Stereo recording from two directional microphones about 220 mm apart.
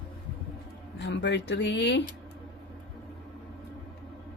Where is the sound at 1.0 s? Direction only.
55° left (ahead or behind).